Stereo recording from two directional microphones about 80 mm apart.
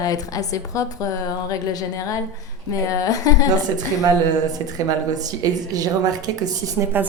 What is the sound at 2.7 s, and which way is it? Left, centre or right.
Speech, left.